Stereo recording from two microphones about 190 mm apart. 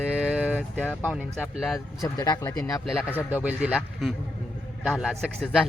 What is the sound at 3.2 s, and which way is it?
A man's voice, 10° right (ahead or behind).